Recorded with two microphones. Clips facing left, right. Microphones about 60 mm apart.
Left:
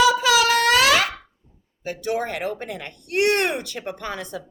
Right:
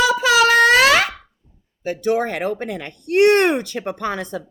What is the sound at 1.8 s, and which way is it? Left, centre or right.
Speech, right.